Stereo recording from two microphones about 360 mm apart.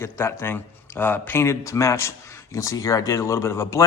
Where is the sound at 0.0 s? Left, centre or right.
Centre.